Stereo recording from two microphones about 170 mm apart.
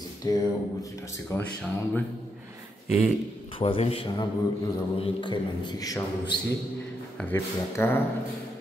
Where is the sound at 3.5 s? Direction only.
35° left (ahead or behind); by 8.0 s 15° left (ahead or behind).